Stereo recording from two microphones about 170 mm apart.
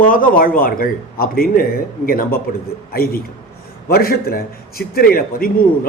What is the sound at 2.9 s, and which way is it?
A man's voice, 60° left (ahead or behind).